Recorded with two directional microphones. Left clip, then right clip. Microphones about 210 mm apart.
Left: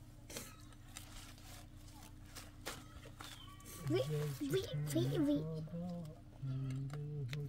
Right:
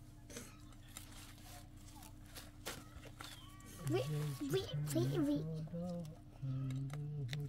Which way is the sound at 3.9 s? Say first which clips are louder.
Left 2 dB; 20° right (ahead or behind).